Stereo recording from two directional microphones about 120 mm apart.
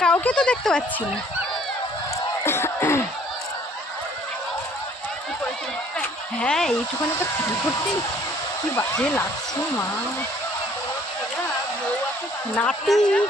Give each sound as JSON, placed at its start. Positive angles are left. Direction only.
{"t": 0.0, "sound": "a woman's voice", "side_deg": 10}
{"t": 2.4, "sound": "crowd", "side_deg": 20}
{"t": 6.0, "sound": "a sound", "side_deg": 5}
{"t": 8.7, "sound": "speech", "side_deg": 20}
{"t": 12.5, "sound": "speech", "side_deg": 5}